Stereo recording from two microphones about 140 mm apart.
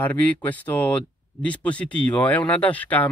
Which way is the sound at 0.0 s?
10° left (ahead or behind).